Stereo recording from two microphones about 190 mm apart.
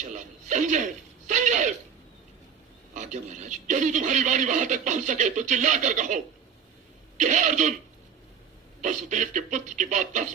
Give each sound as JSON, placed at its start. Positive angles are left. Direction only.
{"t": 0.0, "sound": "speech", "side_deg": -40}
{"t": 2.9, "sound": "speech", "side_deg": -40}
{"t": 7.2, "sound": "speech", "side_deg": -40}
{"t": 8.8, "sound": "speech", "side_deg": -40}